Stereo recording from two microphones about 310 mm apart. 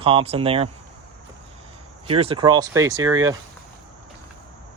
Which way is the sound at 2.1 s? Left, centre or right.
Centre.